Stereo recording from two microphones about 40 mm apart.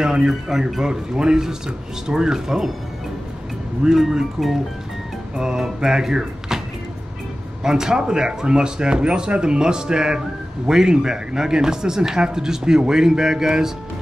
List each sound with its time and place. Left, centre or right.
0.0 s speech: centre
0.3 s speech: centre
3.9 s speech: centre
5.3 s speech: centre
7.6 s speech: centre